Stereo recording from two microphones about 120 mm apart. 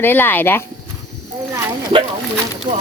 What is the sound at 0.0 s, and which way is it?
Speech, 15° left (ahead or behind).